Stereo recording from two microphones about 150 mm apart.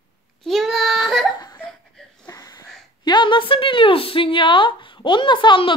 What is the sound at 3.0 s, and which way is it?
Speech, 30° left (ahead or behind).